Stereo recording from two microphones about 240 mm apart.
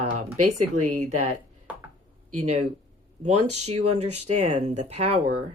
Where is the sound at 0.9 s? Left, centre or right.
Right.